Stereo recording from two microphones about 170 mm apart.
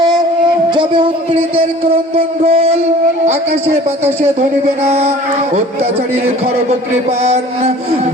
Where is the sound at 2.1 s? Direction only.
35° right (ahead or behind).